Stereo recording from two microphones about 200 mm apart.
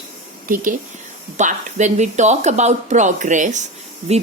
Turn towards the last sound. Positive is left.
turn(degrees=-30)  # may be behind; listen again after turning